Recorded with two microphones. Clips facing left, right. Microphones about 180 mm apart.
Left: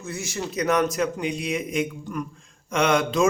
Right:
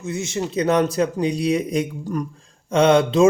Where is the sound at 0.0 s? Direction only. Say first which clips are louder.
Right 6 dB; 20° right (ahead or behind).